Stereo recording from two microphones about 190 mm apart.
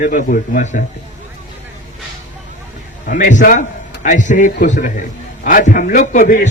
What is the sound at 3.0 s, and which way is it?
A man's voice, 45° left (ahead or behind).